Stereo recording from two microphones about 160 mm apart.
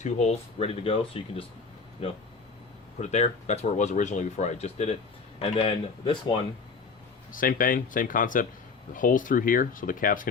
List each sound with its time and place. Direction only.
0.0 s speech: 40° left (ahead or behind)
3.0 s speech: 45° left (ahead or behind)
7.3 s speech: 60° left (ahead or behind)